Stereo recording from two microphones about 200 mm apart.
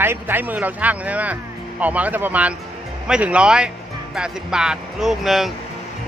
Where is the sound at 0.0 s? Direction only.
10° right (ahead or behind).